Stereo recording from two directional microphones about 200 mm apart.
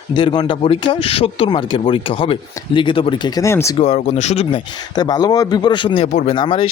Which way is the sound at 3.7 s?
30° left (ahead or behind).